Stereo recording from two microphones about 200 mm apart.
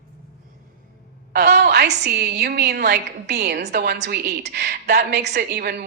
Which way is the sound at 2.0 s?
55° right (ahead or behind).